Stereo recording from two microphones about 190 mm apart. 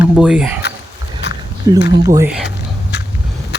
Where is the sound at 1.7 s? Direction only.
20° right (ahead or behind).